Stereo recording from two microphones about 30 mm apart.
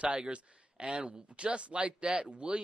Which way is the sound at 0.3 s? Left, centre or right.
Right.